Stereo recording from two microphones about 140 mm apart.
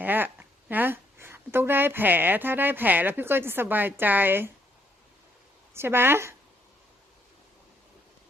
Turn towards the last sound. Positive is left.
turn(degrees=-20)  # may be behind; listen again after turning